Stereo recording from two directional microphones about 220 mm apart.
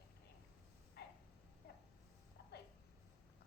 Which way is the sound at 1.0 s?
50° left (ahead or behind).